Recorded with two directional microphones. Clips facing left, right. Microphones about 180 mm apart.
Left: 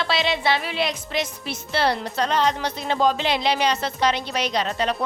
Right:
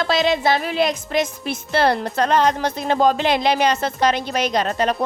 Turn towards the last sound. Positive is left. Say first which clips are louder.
# right 4 dB
turn(degrees=-45)  # may be behind; listen again after turning